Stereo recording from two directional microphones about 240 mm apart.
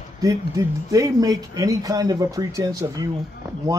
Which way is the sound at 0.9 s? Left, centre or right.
Centre.